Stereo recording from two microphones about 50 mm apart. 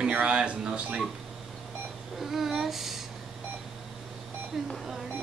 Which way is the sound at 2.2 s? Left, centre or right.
Centre.